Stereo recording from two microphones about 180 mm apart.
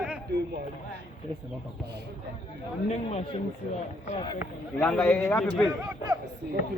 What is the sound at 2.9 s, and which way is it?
Speech, 35° left (ahead or behind).